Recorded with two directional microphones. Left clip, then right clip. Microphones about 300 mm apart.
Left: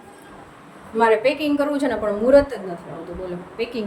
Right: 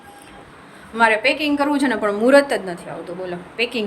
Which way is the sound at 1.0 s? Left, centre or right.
Centre.